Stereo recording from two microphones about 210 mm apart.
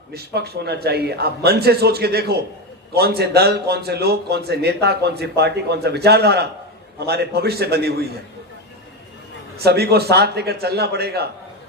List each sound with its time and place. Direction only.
0.1 s a man's voice: 50° right (ahead or behind)
9.6 s a man's voice: 50° right (ahead or behind)